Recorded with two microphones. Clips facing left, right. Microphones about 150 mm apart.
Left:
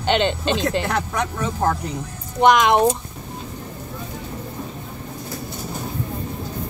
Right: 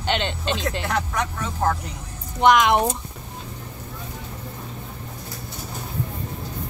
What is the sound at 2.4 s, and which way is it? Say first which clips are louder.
Speech: left 2 dB; centre (ahead or behind).